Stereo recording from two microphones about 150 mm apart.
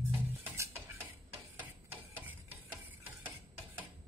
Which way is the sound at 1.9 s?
10° right (ahead or behind).